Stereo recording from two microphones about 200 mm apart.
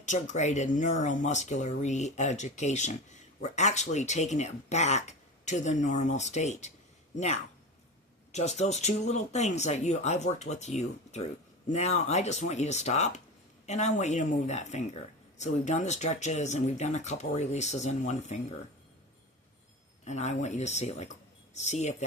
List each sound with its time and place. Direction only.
0.0 s speech: 35° left (ahead or behind)
8.3 s speech: 35° left (ahead or behind)
20.1 s speech: 35° left (ahead or behind)